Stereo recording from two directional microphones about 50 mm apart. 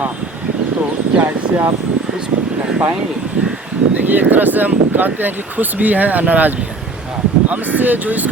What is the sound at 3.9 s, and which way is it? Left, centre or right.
Speech, right.